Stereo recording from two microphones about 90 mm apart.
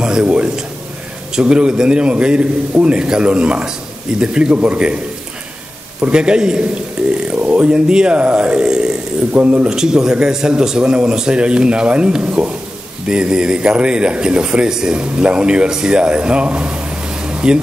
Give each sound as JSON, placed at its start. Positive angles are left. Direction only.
{"t": 0.0, "sound": "a man's voice", "side_deg": -10}
{"t": 5.9, "sound": "a man's voice", "side_deg": -10}